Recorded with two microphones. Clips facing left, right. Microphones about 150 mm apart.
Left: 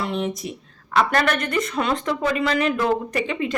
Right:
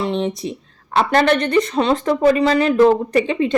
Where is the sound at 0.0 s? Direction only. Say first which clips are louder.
Right 5 dB; 30° right (ahead or behind).